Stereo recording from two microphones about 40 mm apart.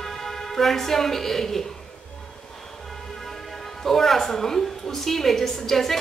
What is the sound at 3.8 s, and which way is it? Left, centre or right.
A woman's voice, centre.